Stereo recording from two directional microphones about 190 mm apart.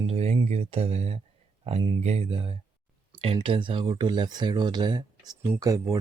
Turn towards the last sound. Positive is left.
turn(degrees=-20)  # may be behind; listen again after turning